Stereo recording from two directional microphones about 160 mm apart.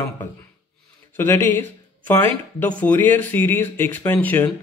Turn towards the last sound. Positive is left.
turn(degrees=10)  # may be behind; listen again after turning